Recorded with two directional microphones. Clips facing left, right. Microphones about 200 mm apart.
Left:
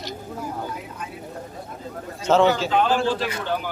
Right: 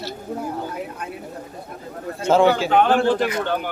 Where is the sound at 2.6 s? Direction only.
60° right (ahead or behind).